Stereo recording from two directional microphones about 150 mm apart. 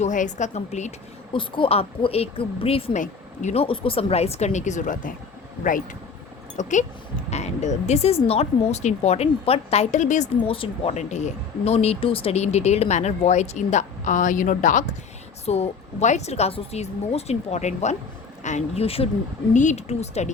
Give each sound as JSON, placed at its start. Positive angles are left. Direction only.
{"t": 0.0, "sound": "a woman's voice", "side_deg": 55}
{"t": 6.6, "sound": "speech", "side_deg": 55}
{"t": 10.4, "sound": "speech", "side_deg": 40}
{"t": 15.4, "sound": "speech", "side_deg": 45}